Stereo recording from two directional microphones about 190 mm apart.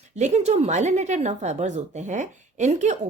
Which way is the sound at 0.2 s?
35° right (ahead or behind).